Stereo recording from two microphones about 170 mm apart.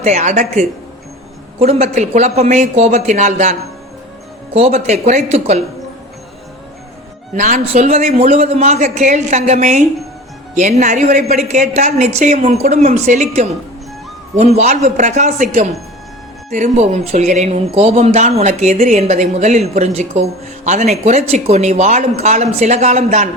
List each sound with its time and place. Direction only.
0.0 s a woman's voice: 40° right (ahead or behind)
7.3 s a woman's voice: 45° right (ahead or behind)